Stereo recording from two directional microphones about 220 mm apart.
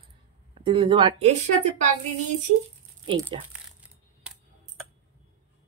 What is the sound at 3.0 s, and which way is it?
Speech, 20° right (ahead or behind).